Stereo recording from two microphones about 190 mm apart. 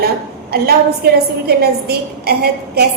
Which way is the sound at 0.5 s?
55° right (ahead or behind).